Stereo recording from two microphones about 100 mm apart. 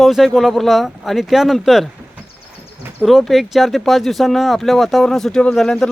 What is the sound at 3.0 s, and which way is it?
Speech, centre (ahead or behind).